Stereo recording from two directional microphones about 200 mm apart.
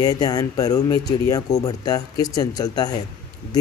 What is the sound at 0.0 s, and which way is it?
Speech, 20° left (ahead or behind).